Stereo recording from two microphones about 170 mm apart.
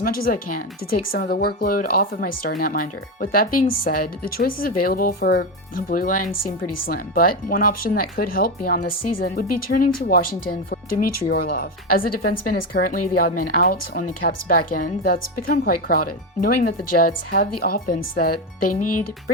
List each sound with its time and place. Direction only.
0.0 s speech: 60° left (ahead or behind)